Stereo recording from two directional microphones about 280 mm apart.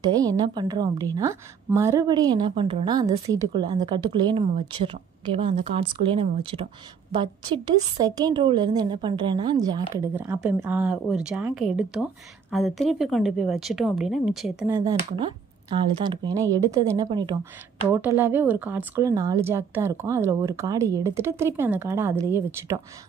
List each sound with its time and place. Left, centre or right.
0.0 s a woman's voice: centre
14.8 s a woman's voice: centre